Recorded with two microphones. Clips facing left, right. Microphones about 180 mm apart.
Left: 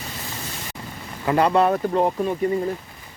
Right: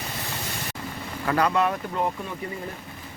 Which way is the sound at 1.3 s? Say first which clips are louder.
Left 5 dB; 25° left (ahead or behind).